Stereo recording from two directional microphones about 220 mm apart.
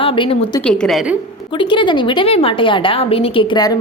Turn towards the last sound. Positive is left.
turn(degrees=20)  # may be behind; listen again after turning